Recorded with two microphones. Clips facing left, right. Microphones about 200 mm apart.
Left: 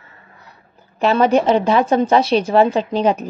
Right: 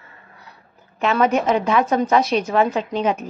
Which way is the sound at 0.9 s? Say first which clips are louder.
Left 4 dB; 35° left (ahead or behind).